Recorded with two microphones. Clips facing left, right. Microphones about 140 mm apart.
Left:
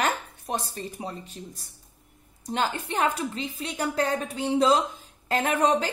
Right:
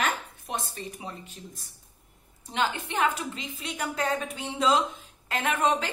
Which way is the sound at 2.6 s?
40° left (ahead or behind).